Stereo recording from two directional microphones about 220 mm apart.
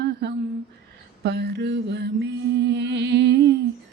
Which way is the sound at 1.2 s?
50° right (ahead or behind).